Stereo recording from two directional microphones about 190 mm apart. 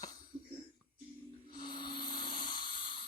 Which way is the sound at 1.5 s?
25° left (ahead or behind).